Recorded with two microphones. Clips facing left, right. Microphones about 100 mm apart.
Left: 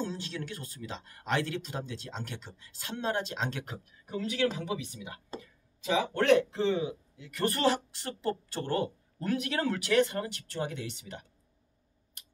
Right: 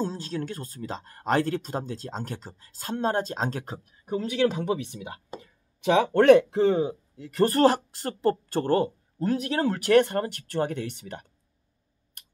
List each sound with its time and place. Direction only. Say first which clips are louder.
0.0 s speech: right 6 dB; 40° right (ahead or behind)
5.8 s speech: right 8 dB; 60° right (ahead or behind)